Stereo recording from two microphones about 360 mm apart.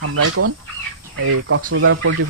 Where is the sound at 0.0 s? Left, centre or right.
Right.